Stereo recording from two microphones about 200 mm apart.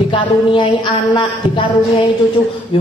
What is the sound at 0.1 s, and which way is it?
Speech, 25° left (ahead or behind).